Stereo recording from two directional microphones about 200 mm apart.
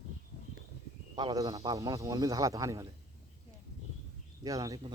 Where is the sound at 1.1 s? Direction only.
20° right (ahead or behind).